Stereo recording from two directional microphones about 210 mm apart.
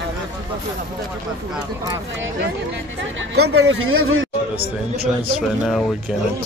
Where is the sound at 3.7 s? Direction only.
70° right (ahead or behind).